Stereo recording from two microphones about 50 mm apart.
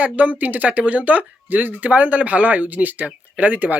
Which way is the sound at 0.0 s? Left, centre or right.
Right.